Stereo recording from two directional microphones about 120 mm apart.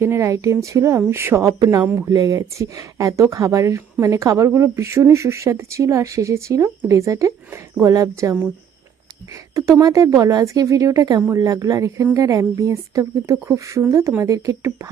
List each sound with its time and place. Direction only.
0.0 s a woman's voice: 20° right (ahead or behind)
9.6 s a woman's voice: 30° right (ahead or behind)